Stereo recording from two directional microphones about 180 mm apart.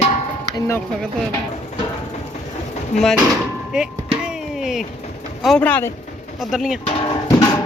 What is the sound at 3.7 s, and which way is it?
Music, 5° right (ahead or behind).